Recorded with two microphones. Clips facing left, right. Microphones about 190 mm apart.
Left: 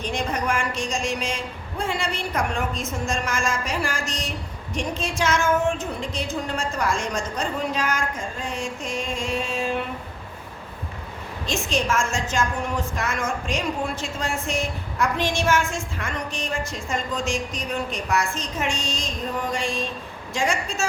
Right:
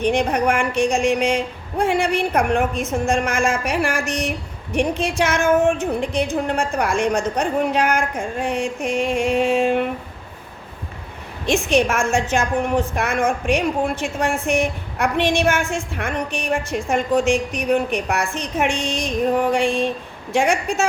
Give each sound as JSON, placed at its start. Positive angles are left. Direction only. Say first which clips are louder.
{"t": 0.0, "sound": "a woman's voice", "louder": "right 8 dB", "side_deg": -65}
{"t": 11.4, "sound": "a woman's voice", "louder": "right 7 dB", "side_deg": -60}